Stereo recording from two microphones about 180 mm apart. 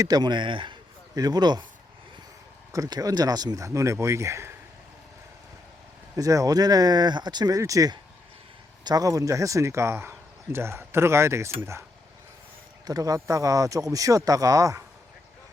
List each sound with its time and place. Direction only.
0.0 s a man's voice: 20° right (ahead or behind)
2.7 s speech: 20° right (ahead or behind)
6.1 s speech: 20° right (ahead or behind)
12.8 s speech: 20° right (ahead or behind)